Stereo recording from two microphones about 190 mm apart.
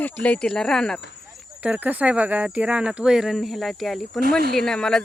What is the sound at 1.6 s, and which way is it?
Speech, 10° right (ahead or behind).